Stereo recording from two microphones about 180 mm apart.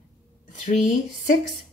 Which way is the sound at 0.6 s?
45° left (ahead or behind).